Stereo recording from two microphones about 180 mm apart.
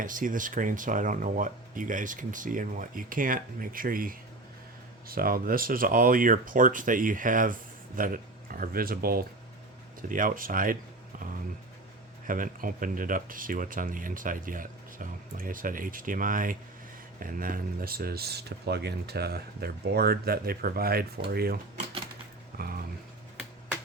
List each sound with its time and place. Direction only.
0.0 s speech: 50° right (ahead or behind)
12.3 s speech: 50° right (ahead or behind)
22.5 s a sound: 55° right (ahead or behind)